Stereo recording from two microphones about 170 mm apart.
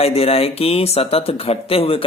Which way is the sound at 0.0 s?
35° left (ahead or behind).